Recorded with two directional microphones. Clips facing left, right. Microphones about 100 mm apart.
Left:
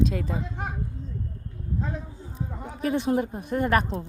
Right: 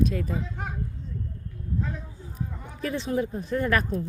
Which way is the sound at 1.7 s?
25° left (ahead or behind).